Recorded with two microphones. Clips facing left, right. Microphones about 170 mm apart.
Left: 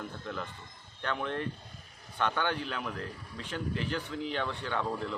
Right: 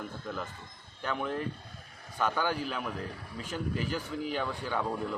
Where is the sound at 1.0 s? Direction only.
5° right (ahead or behind).